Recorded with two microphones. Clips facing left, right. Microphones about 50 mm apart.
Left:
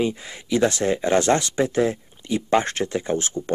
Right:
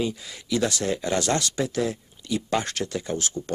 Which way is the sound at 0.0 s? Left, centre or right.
Left.